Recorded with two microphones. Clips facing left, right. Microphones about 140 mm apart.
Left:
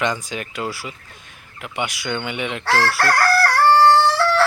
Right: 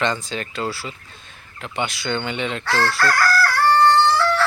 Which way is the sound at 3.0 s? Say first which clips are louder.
Left 1 dB; 60° left (ahead or behind).